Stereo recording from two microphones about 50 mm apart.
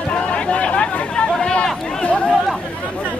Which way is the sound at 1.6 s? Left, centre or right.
Centre.